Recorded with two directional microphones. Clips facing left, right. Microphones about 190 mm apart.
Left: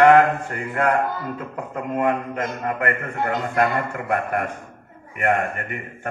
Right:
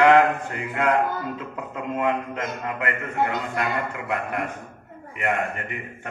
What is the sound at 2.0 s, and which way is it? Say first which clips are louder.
A man's voice: left 3 dB; 50° left (ahead or behind).